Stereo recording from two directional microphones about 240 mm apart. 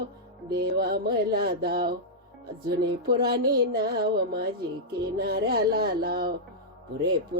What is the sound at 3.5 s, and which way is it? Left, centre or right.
Speech, right.